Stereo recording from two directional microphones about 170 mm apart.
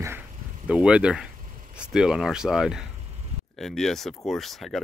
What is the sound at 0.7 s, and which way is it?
Speech, 5° right (ahead or behind).